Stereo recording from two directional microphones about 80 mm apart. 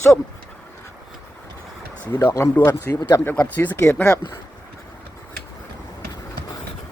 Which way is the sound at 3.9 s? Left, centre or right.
Centre.